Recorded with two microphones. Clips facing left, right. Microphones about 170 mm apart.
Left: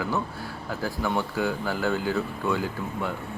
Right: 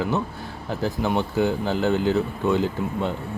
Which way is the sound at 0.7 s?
20° right (ahead or behind).